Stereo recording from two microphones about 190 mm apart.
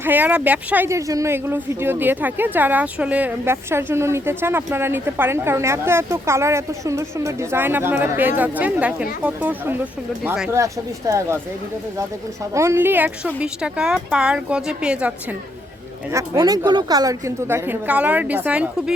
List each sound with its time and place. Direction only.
0.0 s speech: 10° right (ahead or behind)
10.5 s speech: 15° right (ahead or behind)
12.5 s speech: 15° right (ahead or behind)
16.1 s speech: 20° right (ahead or behind)